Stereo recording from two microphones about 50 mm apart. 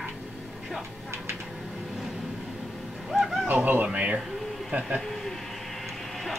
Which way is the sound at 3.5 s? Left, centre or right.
Right.